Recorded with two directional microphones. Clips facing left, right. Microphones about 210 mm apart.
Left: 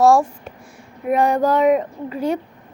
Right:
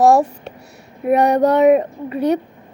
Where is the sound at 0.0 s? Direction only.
20° right (ahead or behind).